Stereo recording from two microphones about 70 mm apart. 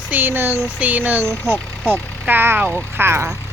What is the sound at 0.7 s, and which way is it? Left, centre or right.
Speech, right.